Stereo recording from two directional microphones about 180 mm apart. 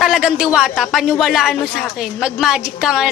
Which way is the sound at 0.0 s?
5° right (ahead or behind).